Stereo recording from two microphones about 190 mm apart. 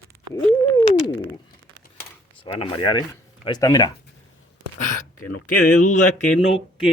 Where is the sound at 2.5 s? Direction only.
25° left (ahead or behind).